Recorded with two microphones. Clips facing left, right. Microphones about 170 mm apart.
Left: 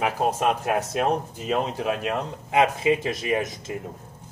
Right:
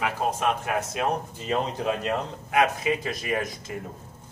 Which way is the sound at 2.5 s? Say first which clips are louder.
Left 3 dB; 25° left (ahead or behind).